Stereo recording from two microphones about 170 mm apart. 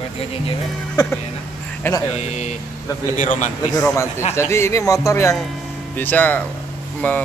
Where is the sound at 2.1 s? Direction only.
40° left (ahead or behind).